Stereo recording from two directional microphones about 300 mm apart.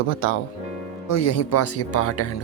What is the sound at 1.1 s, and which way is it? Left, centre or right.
Speech, left.